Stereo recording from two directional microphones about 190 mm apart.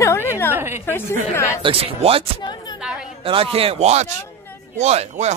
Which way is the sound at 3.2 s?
30° right (ahead or behind).